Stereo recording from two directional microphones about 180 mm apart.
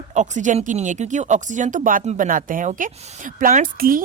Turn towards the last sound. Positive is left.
turn(degrees=-50)  # may be behind; listen again after turning